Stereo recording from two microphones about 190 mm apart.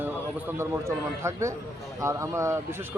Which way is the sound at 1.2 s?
15° right (ahead or behind).